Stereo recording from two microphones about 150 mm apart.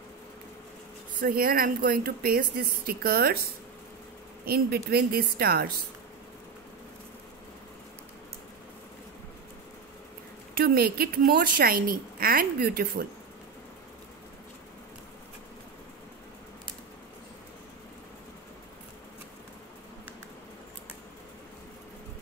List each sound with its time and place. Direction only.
1.2 s a woman's voice: 80° right
4.5 s a woman's voice: 90° right
10.5 s a woman's voice: 85° right